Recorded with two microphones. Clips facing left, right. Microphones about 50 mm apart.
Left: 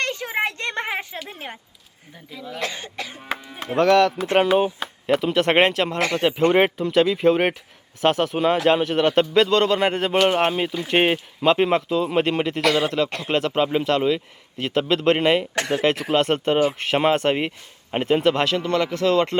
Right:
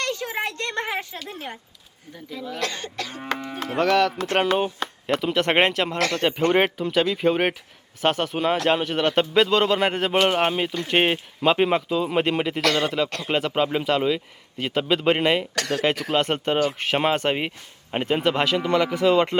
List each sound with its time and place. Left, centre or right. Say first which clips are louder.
0.0 s a sound: left 3 dB; left
2.3 s speech: right 2 dB; centre
2.6 s cough: left 1 dB; centre
3.8 s speech: left 4 dB; centre
6.0 s speech: left 1 dB; left
6.6 s speech: left 3 dB; centre
13.1 s cough: left 1 dB; centre
13.3 s speech: left 2 dB; centre
15.5 s speech: left 2 dB; left
15.8 s speech: left 2 dB; centre